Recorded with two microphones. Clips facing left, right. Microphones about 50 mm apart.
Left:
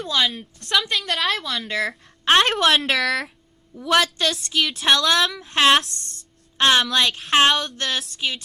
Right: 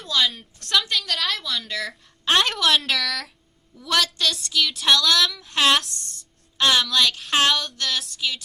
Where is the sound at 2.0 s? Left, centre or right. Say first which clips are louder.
Left 3 dB; left.